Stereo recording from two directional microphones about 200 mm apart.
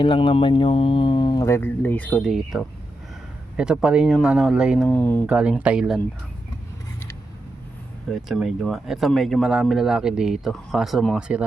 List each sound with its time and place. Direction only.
0.0 s speech: 25° left (ahead or behind); by 4.9 s 5° right (ahead or behind)
4.9 s speech: 10° left (ahead or behind)
5.2 s speech: 5° right (ahead or behind)
8.1 s speech: centre (ahead or behind)